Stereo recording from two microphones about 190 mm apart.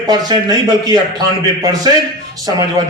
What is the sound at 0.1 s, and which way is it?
Speech, 20° right (ahead or behind).